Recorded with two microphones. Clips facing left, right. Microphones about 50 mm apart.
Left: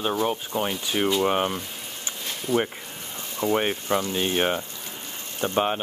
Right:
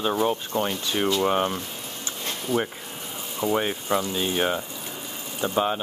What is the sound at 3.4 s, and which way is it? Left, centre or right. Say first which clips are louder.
Speech: left 1 dB; centre.